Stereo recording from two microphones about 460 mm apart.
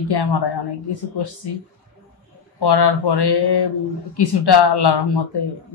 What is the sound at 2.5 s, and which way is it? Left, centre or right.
A woman's voice, left.